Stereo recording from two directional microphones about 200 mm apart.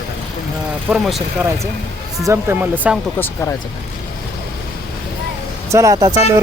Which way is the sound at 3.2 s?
10° left (ahead or behind).